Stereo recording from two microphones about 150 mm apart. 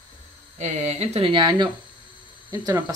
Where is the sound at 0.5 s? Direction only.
50° right (ahead or behind); by 1.6 s 30° right (ahead or behind).